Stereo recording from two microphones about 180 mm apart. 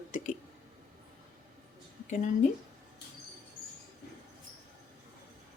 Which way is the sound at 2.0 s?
45° left (ahead or behind).